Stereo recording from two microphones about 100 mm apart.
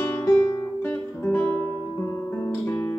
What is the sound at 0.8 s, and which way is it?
Music, 20° left (ahead or behind).